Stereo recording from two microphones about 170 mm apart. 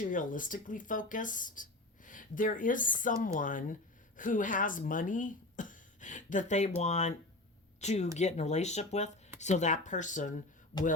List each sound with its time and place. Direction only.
0.0 s speech: 50° left (ahead or behind)